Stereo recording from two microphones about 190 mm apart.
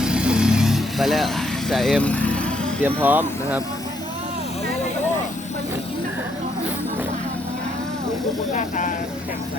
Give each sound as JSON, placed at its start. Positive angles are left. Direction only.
{"t": 0.0, "sound": "vehicle", "side_deg": -5}
{"t": 1.7, "sound": "speech", "side_deg": 0}
{"t": 3.0, "sound": "speech", "side_deg": -10}
{"t": 8.5, "sound": "speech", "side_deg": 40}